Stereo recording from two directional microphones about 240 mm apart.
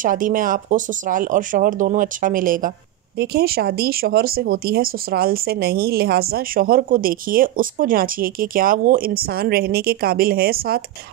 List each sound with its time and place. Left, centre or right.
0.0 s speech: right